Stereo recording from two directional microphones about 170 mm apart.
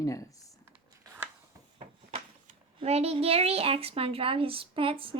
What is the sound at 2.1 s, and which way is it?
Speech, 35° right (ahead or behind).